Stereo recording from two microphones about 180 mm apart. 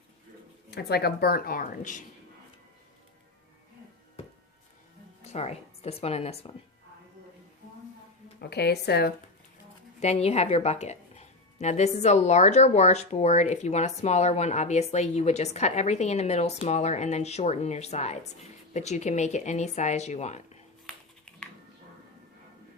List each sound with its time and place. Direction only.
0.7 s speech: 65° left (ahead or behind)
5.2 s speech: 35° left (ahead or behind)
8.4 s speech: 65° left (ahead or behind)
10.0 s a woman's voice: 35° left (ahead or behind)
20.8 s typing: 5° left (ahead or behind)